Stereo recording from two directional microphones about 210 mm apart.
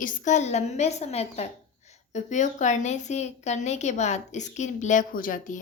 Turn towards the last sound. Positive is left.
turn(degrees=40)  # may be behind; listen again after turning